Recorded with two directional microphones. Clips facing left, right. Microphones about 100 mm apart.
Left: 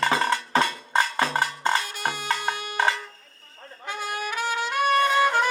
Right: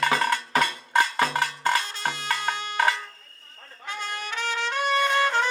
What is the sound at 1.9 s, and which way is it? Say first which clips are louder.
Music: left 1 dB; 10° left (ahead or behind).